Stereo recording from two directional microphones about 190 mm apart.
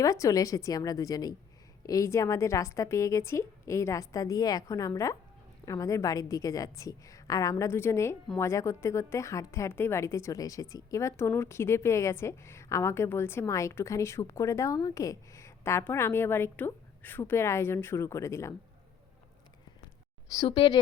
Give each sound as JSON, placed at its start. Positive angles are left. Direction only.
{"t": 0.0, "sound": "a woman's voice", "side_deg": 15}
{"t": 20.4, "sound": "speech", "side_deg": 30}